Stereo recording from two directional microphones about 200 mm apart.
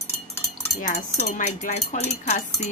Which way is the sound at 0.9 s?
35° left (ahead or behind).